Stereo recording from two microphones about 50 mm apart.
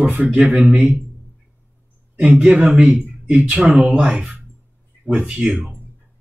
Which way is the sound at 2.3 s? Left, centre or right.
Right.